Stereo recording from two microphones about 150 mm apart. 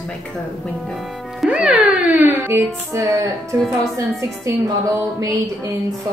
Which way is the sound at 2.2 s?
15° right (ahead or behind).